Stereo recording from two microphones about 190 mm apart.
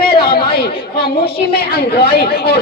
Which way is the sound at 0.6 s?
55° left (ahead or behind).